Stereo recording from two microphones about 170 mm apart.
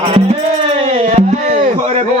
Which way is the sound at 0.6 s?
35° right (ahead or behind).